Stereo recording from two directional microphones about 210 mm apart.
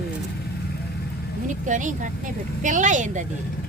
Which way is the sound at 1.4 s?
35° right (ahead or behind).